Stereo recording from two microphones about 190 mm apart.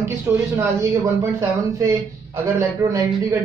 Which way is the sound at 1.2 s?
15° right (ahead or behind).